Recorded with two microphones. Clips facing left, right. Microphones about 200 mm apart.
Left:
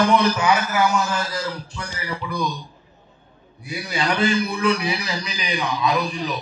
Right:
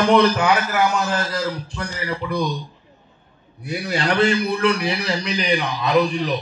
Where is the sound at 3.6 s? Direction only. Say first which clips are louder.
Right 2 dB; 65° right (ahead or behind).